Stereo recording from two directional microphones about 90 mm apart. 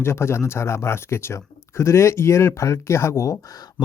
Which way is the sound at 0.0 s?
30° left (ahead or behind).